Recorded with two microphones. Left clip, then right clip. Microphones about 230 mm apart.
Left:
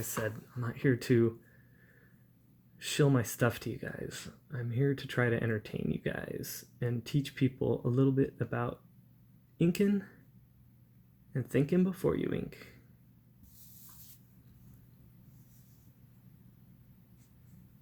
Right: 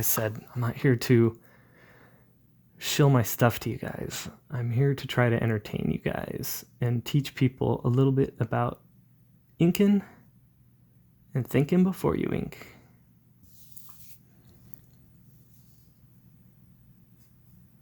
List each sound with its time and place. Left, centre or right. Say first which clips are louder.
0.0 s speech: right 6 dB; right
2.7 s speech: right 5 dB; right
11.3 s speech: right 5 dB; right